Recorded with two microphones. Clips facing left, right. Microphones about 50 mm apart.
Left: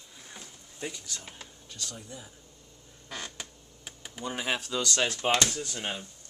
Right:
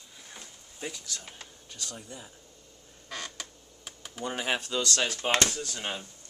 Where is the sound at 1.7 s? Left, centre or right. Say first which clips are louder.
Even; centre.